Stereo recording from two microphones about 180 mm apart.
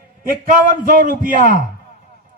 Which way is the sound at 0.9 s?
50° right (ahead or behind).